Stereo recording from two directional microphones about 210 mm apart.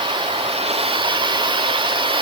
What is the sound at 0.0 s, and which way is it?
Vehicle, 25° right (ahead or behind).